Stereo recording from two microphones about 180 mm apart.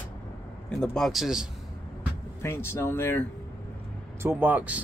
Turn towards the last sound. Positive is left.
turn(degrees=-10)  # may be behind; listen again after turning